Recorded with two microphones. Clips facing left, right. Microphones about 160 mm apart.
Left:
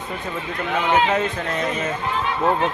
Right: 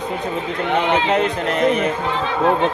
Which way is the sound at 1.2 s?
75° right (ahead or behind).